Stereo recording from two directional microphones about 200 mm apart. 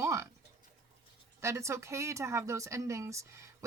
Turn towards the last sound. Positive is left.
turn(degrees=-15)  # may be behind; listen again after turning